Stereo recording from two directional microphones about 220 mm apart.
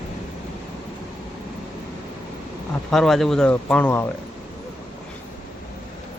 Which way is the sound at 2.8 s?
Centre (ahead or behind).